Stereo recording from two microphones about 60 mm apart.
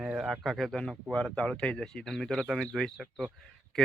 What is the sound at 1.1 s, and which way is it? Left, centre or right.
Speech, centre.